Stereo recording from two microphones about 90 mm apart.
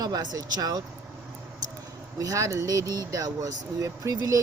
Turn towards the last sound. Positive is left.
turn(degrees=-40)  # may be behind; listen again after turning